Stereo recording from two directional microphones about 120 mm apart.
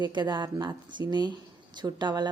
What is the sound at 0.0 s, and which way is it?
A woman's voice, 40° right (ahead or behind).